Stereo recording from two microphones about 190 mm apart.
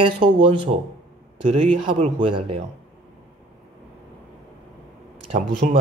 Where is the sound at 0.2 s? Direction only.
25° right (ahead or behind).